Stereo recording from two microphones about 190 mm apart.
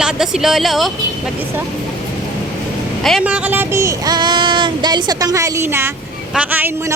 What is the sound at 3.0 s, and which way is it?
A woman's voice, 5° right (ahead or behind).